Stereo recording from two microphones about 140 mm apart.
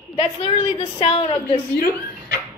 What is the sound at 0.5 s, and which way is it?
Speech, 45° left (ahead or behind).